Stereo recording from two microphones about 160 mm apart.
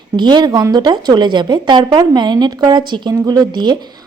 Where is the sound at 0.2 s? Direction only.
30° right (ahead or behind).